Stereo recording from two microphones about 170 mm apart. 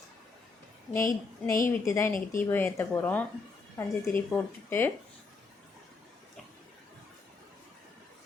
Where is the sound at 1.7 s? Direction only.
15° left (ahead or behind).